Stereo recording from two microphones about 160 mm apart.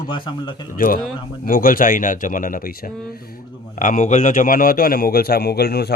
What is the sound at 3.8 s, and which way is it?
A man's voice, 50° left (ahead or behind).